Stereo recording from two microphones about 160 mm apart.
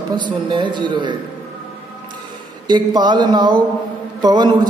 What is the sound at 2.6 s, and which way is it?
A man's voice, 30° right (ahead or behind).